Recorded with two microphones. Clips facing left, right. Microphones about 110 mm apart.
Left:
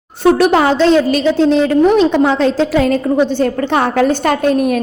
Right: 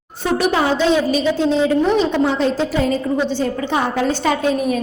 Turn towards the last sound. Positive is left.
turn(degrees=65)  # may be behind; listen again after turning